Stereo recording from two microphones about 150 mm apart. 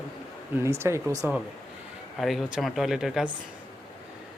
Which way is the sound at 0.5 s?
15° right (ahead or behind).